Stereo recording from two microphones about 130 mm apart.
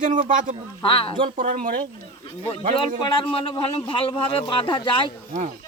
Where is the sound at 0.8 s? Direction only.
45° left (ahead or behind).